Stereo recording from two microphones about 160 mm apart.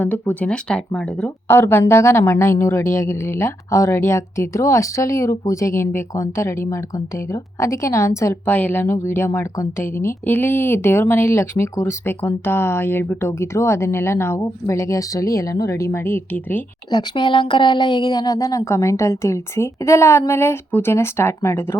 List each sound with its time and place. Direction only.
0.0 s speech: 10° left (ahead or behind)
16.9 s speech: 25° left (ahead or behind)